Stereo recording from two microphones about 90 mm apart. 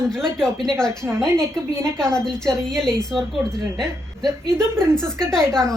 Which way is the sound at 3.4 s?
25° right (ahead or behind).